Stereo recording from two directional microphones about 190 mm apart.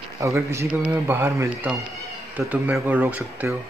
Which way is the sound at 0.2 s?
15° right (ahead or behind).